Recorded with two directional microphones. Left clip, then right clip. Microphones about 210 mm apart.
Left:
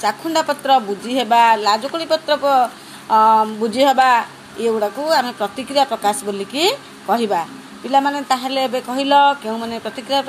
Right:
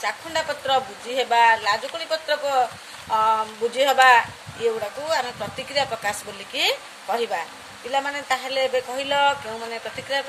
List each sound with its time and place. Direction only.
0.0 s a woman's voice: 25° left (ahead or behind)